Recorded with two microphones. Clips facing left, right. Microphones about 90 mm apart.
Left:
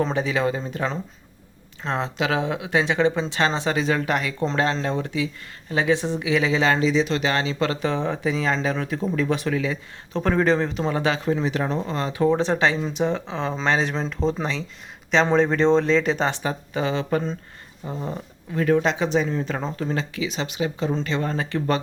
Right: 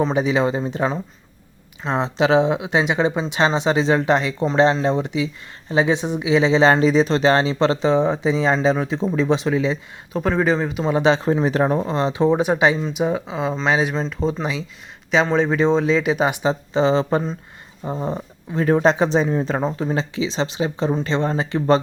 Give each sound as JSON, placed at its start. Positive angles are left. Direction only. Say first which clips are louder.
{"t": 0.1, "sound": "speech", "louder": "right 4 dB", "side_deg": -20}
{"t": 10.1, "sound": "speech", "louder": "right 1 dB", "side_deg": -5}
{"t": 10.9, "sound": "speech", "louder": "right 8 dB", "side_deg": -25}
{"t": 16.5, "sound": "speech", "louder": "right 7 dB", "side_deg": -25}
{"t": 19.6, "sound": "speech", "louder": "right 4 dB", "side_deg": -20}